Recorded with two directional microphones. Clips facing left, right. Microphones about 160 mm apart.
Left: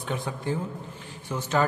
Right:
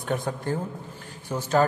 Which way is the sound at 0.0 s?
45° right (ahead or behind).